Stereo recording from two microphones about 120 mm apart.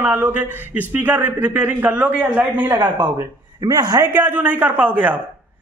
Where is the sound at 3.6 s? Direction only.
35° right (ahead or behind).